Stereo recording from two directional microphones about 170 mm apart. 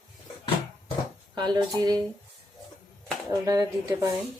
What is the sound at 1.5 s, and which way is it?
Speech, 20° right (ahead or behind).